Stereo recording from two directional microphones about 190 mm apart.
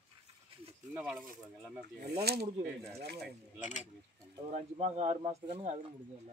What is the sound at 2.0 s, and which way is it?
Speech, 55° right (ahead or behind).